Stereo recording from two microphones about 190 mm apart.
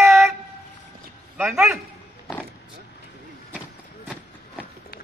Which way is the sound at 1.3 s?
Centre (ahead or behind).